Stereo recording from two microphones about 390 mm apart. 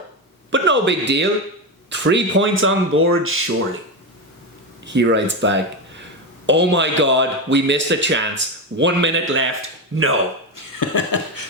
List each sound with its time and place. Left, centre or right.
0.5 s speech: right
4.9 s speech: right
10.5 s chuckle: left